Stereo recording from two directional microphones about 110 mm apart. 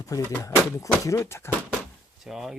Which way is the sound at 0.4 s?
30° left (ahead or behind).